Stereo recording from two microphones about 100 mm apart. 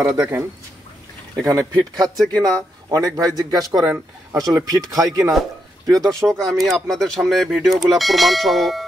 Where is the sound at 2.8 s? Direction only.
35° right (ahead or behind).